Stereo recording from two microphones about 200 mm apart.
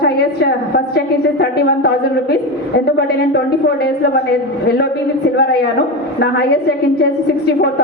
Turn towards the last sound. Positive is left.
turn(degrees=55)  # may be behind; listen again after turning